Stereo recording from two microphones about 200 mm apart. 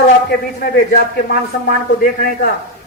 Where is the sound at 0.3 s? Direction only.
50° left (ahead or behind).